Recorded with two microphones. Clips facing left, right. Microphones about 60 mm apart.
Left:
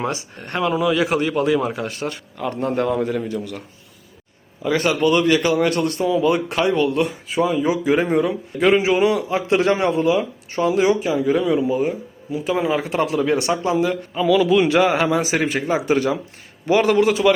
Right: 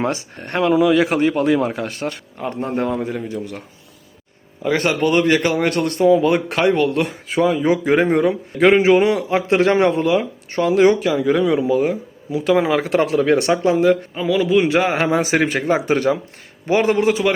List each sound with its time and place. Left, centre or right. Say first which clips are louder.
0.0 s speech: right 3 dB; right
0.7 s speech: right 4 dB; right
2.4 s a man's voice: left 1 dB; right
4.6 s a man's voice: even; right
11.7 s a man's voice: right 3 dB; right
16.6 s speech: even; right